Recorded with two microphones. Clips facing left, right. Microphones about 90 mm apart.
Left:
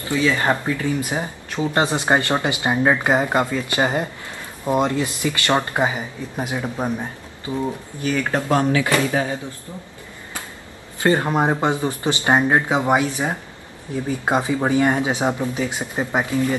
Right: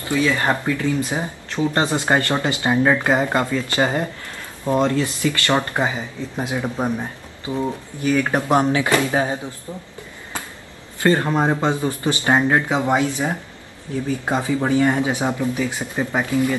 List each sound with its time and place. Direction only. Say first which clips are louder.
0.1 s speech: even; 20° right (ahead or behind)
0.5 s speech: even; 15° left (ahead or behind)
6.4 s speech: right 1 dB; 15° right (ahead or behind)
11.0 s speech: even; 15° left (ahead or behind)